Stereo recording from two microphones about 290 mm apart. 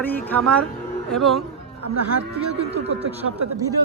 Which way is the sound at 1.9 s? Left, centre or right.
Right.